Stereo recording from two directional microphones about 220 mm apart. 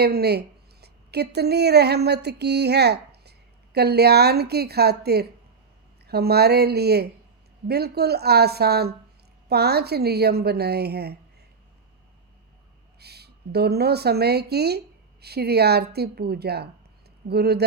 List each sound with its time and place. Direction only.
0.0 s a woman's voice: 45° right (ahead or behind)
13.0 s a woman's voice: 45° right (ahead or behind)